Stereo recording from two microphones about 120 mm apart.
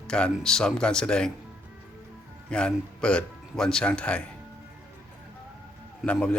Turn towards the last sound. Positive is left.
turn(degrees=10)  # may be behind; listen again after turning